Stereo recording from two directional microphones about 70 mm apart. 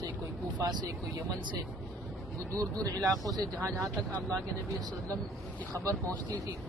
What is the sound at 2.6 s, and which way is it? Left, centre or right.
Speech, right.